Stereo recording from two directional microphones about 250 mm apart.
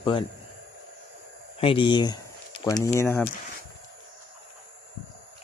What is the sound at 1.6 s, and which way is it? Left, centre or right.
Speech, centre.